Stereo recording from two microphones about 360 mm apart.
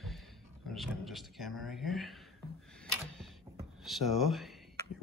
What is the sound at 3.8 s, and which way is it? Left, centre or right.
Speech, centre.